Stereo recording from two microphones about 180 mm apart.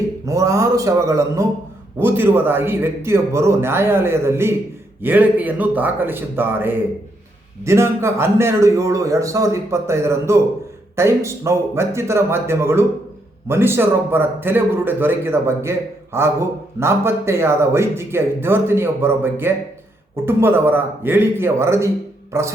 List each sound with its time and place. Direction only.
0.3 s a man's voice: 15° right (ahead or behind)
22.3 s music: 15° right (ahead or behind)